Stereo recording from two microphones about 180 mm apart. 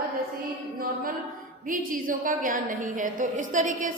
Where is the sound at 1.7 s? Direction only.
50° right (ahead or behind).